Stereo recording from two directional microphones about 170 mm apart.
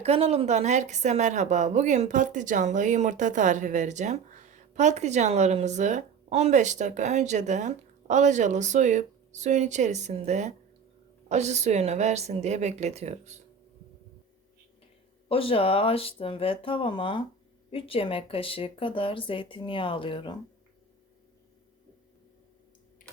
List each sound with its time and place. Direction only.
0.0 s a woman's voice: 40° right (ahead or behind)
15.3 s speech: 35° left (ahead or behind)